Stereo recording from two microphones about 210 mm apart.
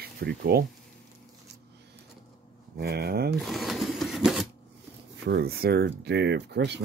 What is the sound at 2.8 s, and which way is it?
Speech, 50° right (ahead or behind).